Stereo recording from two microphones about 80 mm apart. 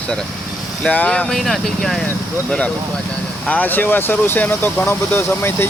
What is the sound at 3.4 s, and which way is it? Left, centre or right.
Speech, left.